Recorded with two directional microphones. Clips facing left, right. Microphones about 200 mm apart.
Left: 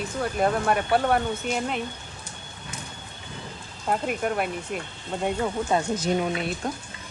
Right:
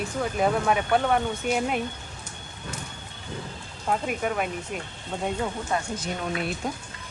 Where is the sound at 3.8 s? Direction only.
Centre (ahead or behind).